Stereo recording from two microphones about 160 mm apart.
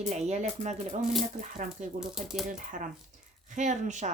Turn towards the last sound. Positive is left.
turn(degrees=-50)  # may be behind; listen again after turning